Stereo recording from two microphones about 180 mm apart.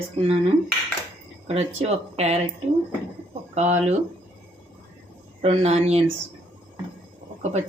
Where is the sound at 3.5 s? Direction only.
40° right (ahead or behind).